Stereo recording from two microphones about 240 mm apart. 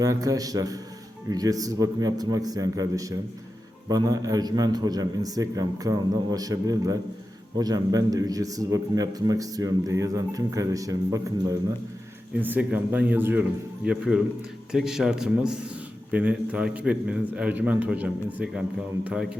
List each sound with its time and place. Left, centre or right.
0.0 s a man's voice: centre